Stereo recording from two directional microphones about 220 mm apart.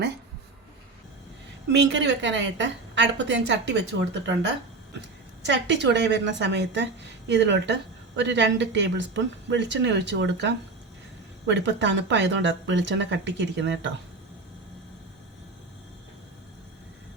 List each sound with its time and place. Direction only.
1.9 s a woman's voice: 55° right (ahead or behind)